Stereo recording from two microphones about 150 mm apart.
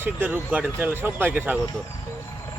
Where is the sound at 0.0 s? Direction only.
10° right (ahead or behind).